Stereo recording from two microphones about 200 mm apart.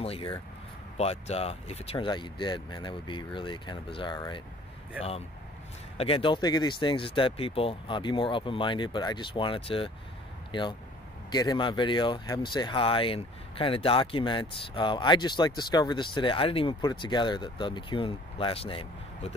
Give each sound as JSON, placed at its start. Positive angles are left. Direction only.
{"t": 0.0, "sound": "speech", "side_deg": 30}
{"t": 5.9, "sound": "speech", "side_deg": 25}